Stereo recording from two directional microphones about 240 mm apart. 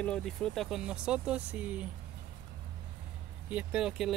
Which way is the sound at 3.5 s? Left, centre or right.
Centre.